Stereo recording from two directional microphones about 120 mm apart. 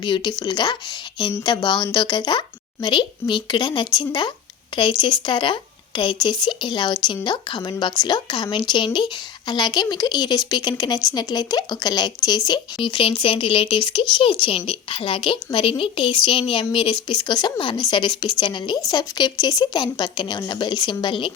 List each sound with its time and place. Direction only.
0.0 s speech: 40° left (ahead or behind)
12.8 s a woman's voice: 45° left (ahead or behind)